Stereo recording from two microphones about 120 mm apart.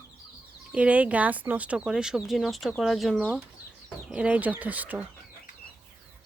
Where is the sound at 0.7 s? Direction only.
10° right (ahead or behind).